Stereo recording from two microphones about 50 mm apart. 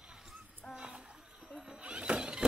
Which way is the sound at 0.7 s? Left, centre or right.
Centre.